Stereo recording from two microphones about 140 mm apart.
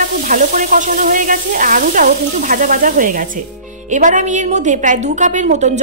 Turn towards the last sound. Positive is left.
turn(degrees=-60)  # may be behind; listen again after turning